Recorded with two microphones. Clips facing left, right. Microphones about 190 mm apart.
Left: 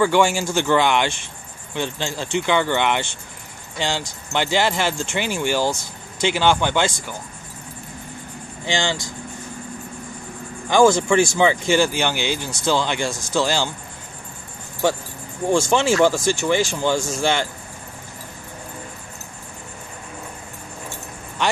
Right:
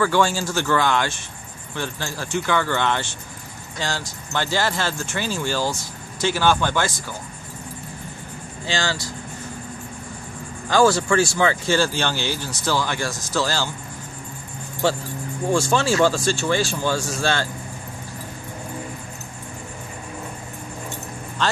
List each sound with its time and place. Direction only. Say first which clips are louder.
0.0 s speech: left 2 dB; 15° left (ahead or behind)
8.6 s speech: left 2 dB; 20° left (ahead or behind)
10.7 s speech: left 2 dB; 20° left (ahead or behind)
15.5 s speech: left 2 dB; 20° left (ahead or behind)